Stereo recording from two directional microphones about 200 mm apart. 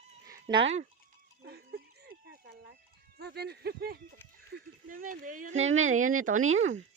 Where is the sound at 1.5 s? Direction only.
50° right (ahead or behind).